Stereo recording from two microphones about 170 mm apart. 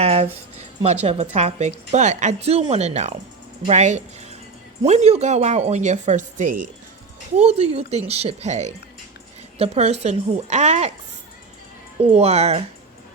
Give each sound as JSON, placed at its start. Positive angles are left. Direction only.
{"t": 0.0, "sound": "a sound", "side_deg": -35}
{"t": 1.0, "sound": "a woman's voice", "side_deg": -40}
{"t": 7.3, "sound": "a woman's voice", "side_deg": -40}
{"t": 11.9, "sound": "a woman's voice", "side_deg": -40}